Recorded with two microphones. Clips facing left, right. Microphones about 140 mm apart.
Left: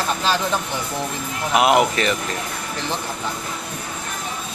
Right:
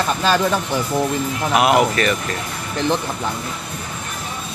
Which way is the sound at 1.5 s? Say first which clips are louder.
Even; 20° left (ahead or behind).